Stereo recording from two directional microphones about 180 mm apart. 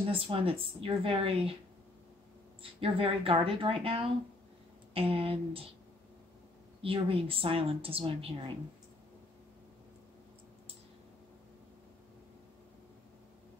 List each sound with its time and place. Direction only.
0.1 s a woman's voice: 30° right (ahead or behind)
2.6 s a woman's voice: 30° right (ahead or behind)
6.8 s a woman's voice: 30° right (ahead or behind)